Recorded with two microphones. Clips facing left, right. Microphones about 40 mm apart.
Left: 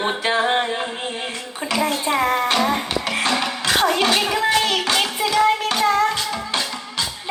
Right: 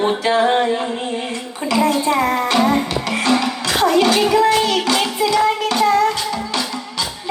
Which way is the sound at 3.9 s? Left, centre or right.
Left.